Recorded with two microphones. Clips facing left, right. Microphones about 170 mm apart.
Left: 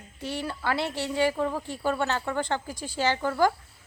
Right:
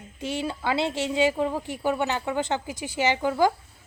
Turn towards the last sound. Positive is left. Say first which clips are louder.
# right 2 dB
turn(degrees=-15)  # may be behind; listen again after turning